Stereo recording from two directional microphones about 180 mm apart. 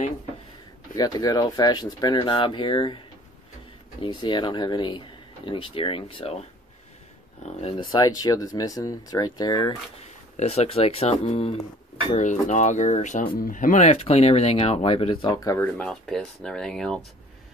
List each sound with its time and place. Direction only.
0.9 s speech: 20° left (ahead or behind)
4.0 s speech: 25° left (ahead or behind)
7.4 s speech: 30° left (ahead or behind)
10.0 s speech: 35° left (ahead or behind)
15.4 s speech: 15° left (ahead or behind)
15.8 s speech: 5° left (ahead or behind)